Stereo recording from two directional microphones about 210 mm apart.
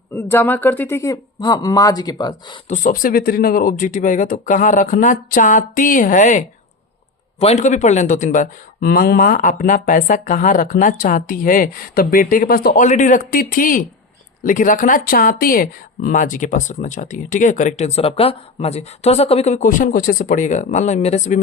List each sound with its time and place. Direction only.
0.1 s speech: 10° left (ahead or behind)
2.6 s speech: 35° left (ahead or behind)